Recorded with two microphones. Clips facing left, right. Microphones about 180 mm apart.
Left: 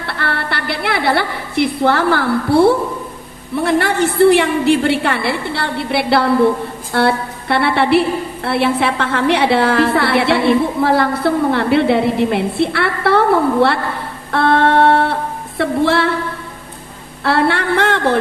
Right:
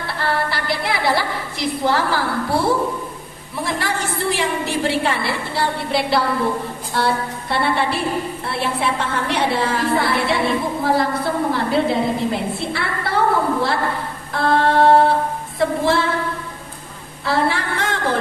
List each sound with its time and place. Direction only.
0.1 s a woman's voice: 65° left (ahead or behind)
17.2 s a woman's voice: 65° left (ahead or behind)